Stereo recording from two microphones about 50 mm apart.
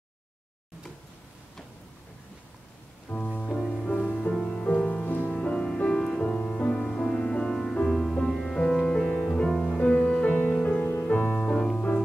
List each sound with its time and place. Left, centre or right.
3.1 s music: left
3.5 s music: centre
4.3 s music: centre
5.0 s music: left
5.3 s music: centre